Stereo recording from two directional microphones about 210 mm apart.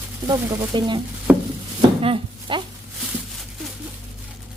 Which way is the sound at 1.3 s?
5° right (ahead or behind).